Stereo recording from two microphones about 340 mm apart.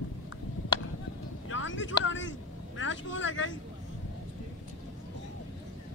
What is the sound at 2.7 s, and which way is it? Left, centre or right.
Speech, left.